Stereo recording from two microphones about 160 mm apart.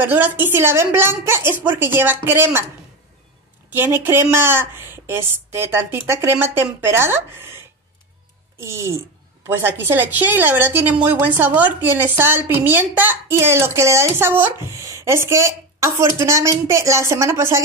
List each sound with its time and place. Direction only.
0.0 s a woman's voice: 10° right (ahead or behind)
3.7 s a woman's voice: 15° right (ahead or behind)